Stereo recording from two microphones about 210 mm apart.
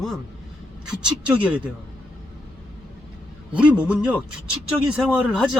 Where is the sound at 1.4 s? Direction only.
5° right (ahead or behind).